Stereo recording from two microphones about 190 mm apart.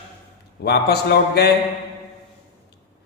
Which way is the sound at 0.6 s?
60° left (ahead or behind).